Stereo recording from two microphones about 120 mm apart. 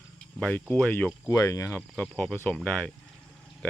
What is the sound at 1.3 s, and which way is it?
Speech, 25° left (ahead or behind).